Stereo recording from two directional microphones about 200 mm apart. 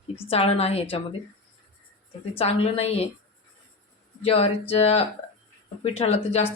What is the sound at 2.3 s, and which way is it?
Speech, 30° left (ahead or behind).